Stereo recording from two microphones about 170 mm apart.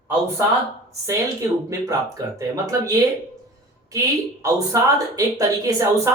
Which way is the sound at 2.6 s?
20° right (ahead or behind).